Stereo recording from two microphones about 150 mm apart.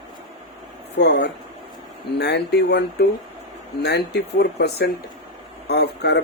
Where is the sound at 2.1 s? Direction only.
90° left.